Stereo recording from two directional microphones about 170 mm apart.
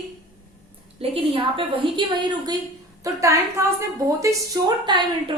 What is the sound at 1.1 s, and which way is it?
Speech, 30° right (ahead or behind).